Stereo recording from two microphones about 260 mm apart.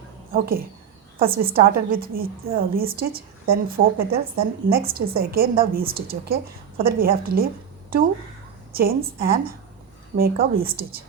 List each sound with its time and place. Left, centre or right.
0.3 s a woman's voice: right